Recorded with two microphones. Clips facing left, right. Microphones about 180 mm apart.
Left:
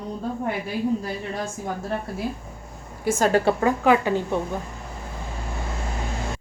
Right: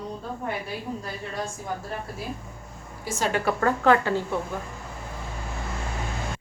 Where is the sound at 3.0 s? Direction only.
50° left (ahead or behind).